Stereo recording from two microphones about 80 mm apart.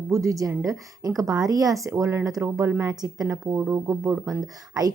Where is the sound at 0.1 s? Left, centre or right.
Right.